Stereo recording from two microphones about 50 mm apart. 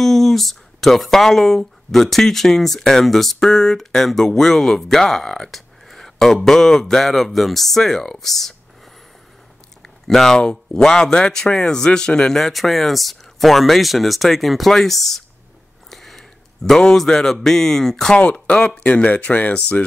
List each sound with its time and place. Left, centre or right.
0.0 s speech: centre
10.0 s speech: centre
12.4 s speech: centre
18.1 s speech: left